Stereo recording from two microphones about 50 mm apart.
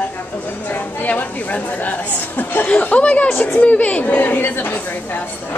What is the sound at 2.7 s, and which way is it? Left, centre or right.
Speech, left.